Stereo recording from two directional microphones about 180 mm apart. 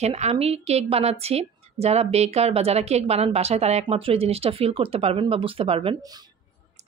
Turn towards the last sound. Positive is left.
turn(degrees=-30)  # may be behind; listen again after turning